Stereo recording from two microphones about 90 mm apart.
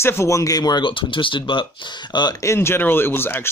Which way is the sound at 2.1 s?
55° left (ahead or behind).